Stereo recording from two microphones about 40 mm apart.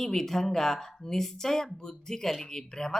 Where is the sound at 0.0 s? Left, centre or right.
Centre.